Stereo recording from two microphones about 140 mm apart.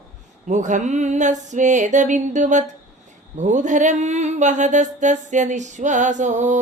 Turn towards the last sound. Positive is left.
turn(degrees=-60)  # may be behind; listen again after turning